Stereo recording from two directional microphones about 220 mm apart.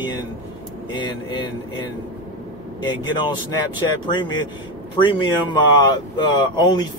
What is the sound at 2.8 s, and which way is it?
Speech, 20° left (ahead or behind).